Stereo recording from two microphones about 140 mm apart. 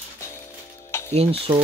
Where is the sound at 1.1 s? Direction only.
45° right (ahead or behind).